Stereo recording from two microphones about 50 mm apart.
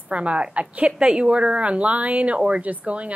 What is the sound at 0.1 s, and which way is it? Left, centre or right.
A child's voice, right.